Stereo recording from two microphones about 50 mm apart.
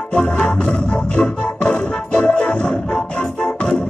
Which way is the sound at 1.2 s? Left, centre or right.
Centre.